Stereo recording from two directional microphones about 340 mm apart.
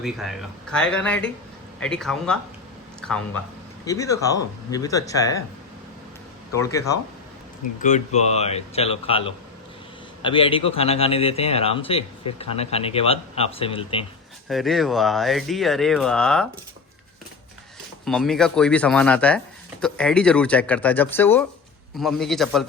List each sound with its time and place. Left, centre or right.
0.0 s a man's voice: centre
6.5 s a man's voice: centre
7.8 s a man's voice: left
14.4 s speech: centre
18.0 s speech: centre